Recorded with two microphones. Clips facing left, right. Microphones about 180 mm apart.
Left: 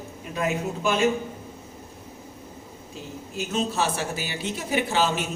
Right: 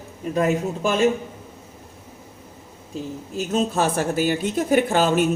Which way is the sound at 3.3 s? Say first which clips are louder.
Right 4 dB; 45° right (ahead or behind).